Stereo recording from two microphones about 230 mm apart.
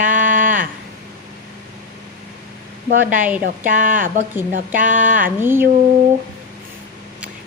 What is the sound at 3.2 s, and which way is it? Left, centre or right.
Speech, centre.